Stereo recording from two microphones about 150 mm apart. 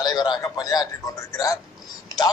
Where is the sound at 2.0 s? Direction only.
25° left (ahead or behind).